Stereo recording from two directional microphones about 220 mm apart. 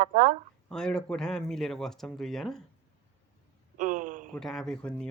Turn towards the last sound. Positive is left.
turn(degrees=5)  # may be behind; listen again after turning